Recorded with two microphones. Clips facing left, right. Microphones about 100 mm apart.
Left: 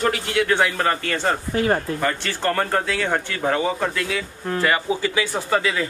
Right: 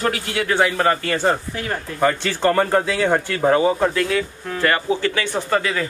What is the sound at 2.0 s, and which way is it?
A man's voice, 15° right (ahead or behind).